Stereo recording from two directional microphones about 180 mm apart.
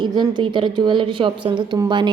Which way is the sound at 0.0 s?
25° right (ahead or behind).